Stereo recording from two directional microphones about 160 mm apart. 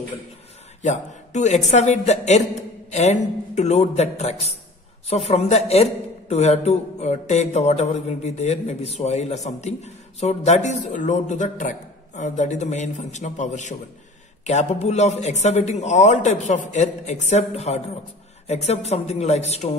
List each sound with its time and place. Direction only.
0.8 s a man's voice: 45° left (ahead or behind)